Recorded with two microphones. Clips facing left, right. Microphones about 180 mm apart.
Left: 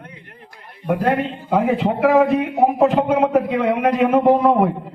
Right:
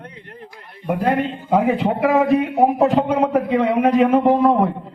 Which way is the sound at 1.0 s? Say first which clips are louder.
Right 3 dB; centre (ahead or behind).